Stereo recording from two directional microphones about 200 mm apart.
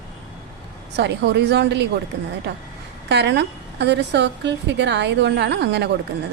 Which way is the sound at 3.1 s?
60° right (ahead or behind).